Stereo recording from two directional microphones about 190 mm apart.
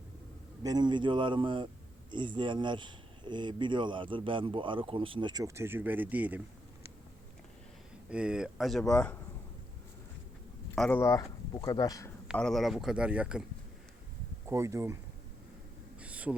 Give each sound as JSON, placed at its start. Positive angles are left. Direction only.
{"t": 0.6, "sound": "speech", "side_deg": -20}
{"t": 8.1, "sound": "speech", "side_deg": -5}
{"t": 10.8, "sound": "speech", "side_deg": 10}
{"t": 12.3, "sound": "speech", "side_deg": 0}
{"t": 14.4, "sound": "speech", "side_deg": -15}
{"t": 16.0, "sound": "a sound", "side_deg": -5}